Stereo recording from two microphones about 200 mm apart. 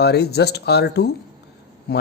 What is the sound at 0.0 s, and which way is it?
A man's voice, 55° left (ahead or behind).